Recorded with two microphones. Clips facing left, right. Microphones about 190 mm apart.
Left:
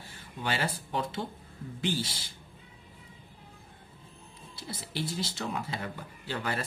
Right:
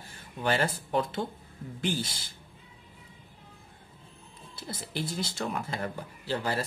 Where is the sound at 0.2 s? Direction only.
50° right (ahead or behind).